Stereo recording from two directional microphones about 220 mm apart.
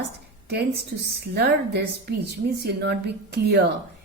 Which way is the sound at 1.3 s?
50° right (ahead or behind).